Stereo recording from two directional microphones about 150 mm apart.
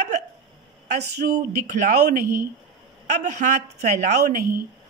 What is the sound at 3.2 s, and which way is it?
Speech, 50° right (ahead or behind).